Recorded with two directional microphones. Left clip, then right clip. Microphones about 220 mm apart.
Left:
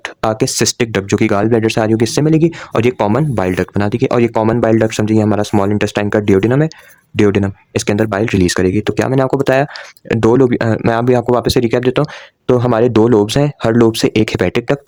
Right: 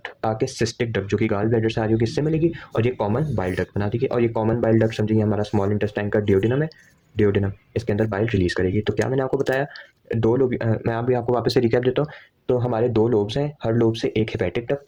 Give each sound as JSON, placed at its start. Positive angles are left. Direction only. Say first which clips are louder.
{"t": 0.0, "sound": "speech", "louder": "left 8 dB", "side_deg": 50}